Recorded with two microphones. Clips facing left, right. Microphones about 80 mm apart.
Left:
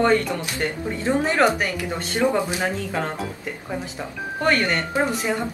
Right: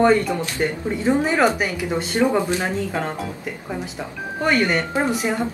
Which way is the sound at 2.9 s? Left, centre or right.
Centre.